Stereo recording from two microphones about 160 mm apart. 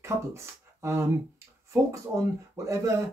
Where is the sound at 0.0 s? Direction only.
20° right (ahead or behind).